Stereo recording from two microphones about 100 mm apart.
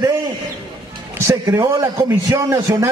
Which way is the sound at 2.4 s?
30° right (ahead or behind).